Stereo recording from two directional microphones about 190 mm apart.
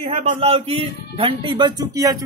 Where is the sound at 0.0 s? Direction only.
30° right (ahead or behind).